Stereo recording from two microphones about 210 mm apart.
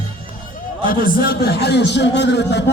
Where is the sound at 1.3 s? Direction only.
55° left (ahead or behind).